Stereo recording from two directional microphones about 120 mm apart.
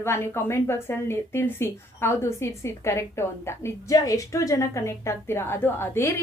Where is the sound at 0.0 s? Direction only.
20° left (ahead or behind).